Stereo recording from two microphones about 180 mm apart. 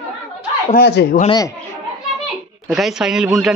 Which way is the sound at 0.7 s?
65° left (ahead or behind).